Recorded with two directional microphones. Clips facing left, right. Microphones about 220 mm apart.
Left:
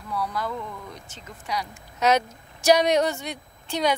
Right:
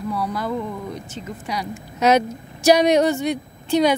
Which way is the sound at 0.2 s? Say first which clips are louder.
Right 5 dB; 10° right (ahead or behind).